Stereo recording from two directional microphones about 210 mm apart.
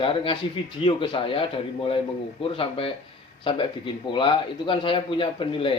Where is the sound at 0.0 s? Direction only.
25° left (ahead or behind).